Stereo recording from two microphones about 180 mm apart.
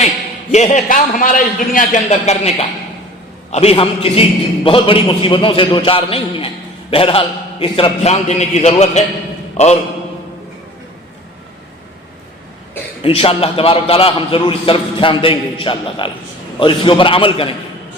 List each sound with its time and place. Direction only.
0.5 s a man's voice: 40° left (ahead or behind)
13.0 s a man's voice: 30° left (ahead or behind)